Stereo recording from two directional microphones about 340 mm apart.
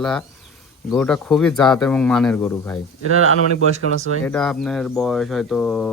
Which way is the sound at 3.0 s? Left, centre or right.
Right.